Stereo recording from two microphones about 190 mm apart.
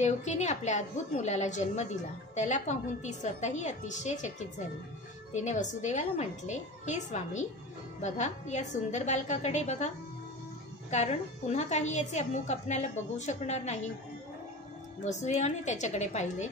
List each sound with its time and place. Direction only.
0.0 s a woman's voice: 35° left (ahead or behind)
10.9 s a woman's voice: 35° left (ahead or behind)
15.0 s a woman's voice: 35° left (ahead or behind)